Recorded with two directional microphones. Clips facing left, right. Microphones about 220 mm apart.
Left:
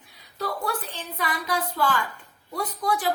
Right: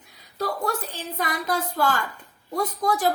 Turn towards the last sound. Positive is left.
turn(degrees=-40)  # may be behind; listen again after turning